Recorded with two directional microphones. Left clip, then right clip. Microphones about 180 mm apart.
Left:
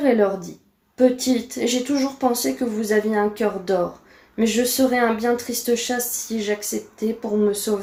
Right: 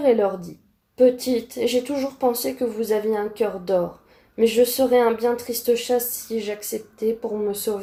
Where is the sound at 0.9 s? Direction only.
40° right (ahead or behind).